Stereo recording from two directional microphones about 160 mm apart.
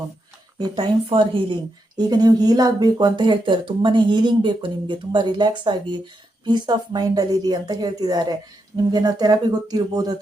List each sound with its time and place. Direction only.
0.6 s speech: 30° right (ahead or behind)